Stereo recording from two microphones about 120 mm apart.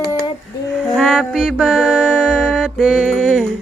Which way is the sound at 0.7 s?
Centre (ahead or behind).